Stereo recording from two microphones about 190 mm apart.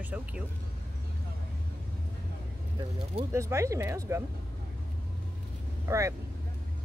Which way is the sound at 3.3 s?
15° right (ahead or behind).